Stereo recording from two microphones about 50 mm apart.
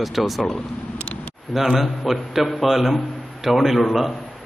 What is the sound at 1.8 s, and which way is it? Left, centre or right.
A man's voice, centre.